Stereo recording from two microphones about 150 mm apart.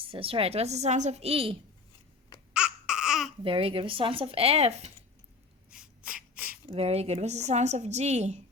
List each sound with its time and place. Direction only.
0.0 s a woman's voice: 40° right (ahead or behind)
2.5 s babbling: 5° right (ahead or behind)
3.4 s a woman's voice: 35° right (ahead or behind)
5.7 s a sound: 5° right (ahead or behind)
6.7 s a woman's voice: 40° right (ahead or behind)